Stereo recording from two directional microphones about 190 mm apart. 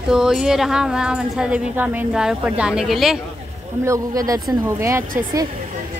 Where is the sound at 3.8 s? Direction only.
15° right (ahead or behind).